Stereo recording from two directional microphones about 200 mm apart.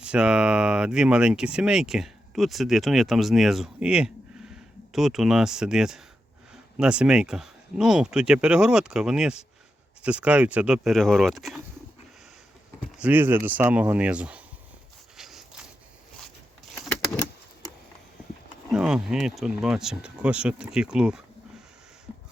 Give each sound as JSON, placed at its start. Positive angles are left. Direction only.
{"t": 0.0, "sound": "speech", "side_deg": -5}
{"t": 13.0, "sound": "speech", "side_deg": -10}
{"t": 15.2, "sound": "a sound", "side_deg": 0}
{"t": 18.7, "sound": "speech", "side_deg": -5}